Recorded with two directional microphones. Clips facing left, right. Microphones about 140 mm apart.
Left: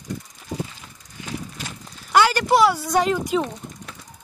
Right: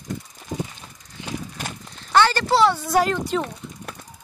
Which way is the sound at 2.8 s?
Centre (ahead or behind).